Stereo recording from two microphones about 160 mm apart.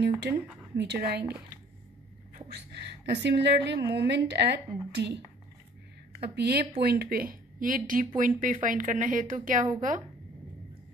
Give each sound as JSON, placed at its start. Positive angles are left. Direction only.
{"t": 0.3, "sound": "speech", "side_deg": -10}
{"t": 0.7, "sound": "a woman's voice", "side_deg": -85}
{"t": 2.5, "sound": "a woman's voice", "side_deg": -90}
{"t": 6.2, "sound": "speech", "side_deg": -90}
{"t": 6.8, "sound": "a woman's voice", "side_deg": -75}